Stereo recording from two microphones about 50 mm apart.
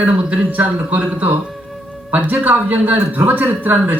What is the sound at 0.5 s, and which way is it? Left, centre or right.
Speech, right.